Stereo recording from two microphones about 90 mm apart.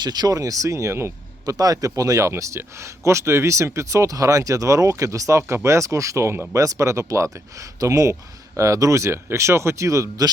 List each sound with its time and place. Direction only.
0.0 s speech: 50° right (ahead or behind); by 1.5 s 30° right (ahead or behind)
1.5 s speech: 40° right (ahead or behind)